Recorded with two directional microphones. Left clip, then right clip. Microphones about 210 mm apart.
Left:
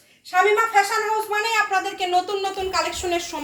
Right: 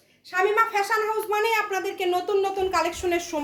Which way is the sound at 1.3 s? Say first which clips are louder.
Left 2 dB; 50° right (ahead or behind).